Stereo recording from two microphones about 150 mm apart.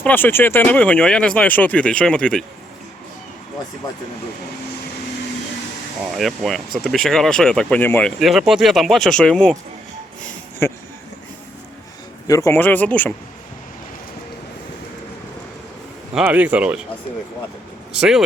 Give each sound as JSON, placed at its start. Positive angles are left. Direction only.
{"t": 0.0, "sound": "speech", "side_deg": 15}
{"t": 6.1, "sound": "speech", "side_deg": 0}
{"t": 8.2, "sound": "speech", "side_deg": 0}
{"t": 10.6, "sound": "speech", "side_deg": 15}
{"t": 12.3, "sound": "speech", "side_deg": 20}
{"t": 16.1, "sound": "speech", "side_deg": -10}
{"t": 17.9, "sound": "speech", "side_deg": -5}